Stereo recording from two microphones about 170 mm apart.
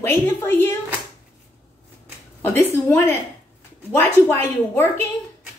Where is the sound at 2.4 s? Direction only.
10° left (ahead or behind).